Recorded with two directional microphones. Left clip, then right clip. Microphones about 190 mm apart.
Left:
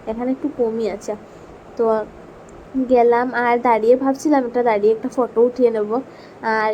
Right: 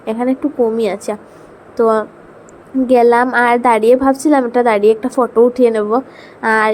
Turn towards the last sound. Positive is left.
turn(degrees=-20)  # may be behind; listen again after turning